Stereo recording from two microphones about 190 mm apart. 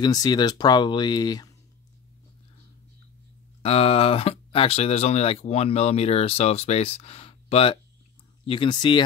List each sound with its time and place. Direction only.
0.0 s speech: 20° left (ahead or behind)
3.6 s speech: 30° left (ahead or behind)